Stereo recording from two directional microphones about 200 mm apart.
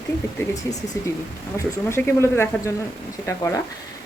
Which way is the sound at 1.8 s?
10° left (ahead or behind).